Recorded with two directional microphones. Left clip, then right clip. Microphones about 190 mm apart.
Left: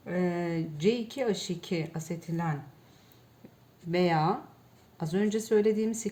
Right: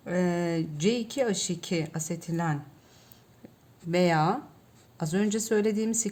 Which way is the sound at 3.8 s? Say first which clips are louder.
Right 2 dB; 40° right (ahead or behind).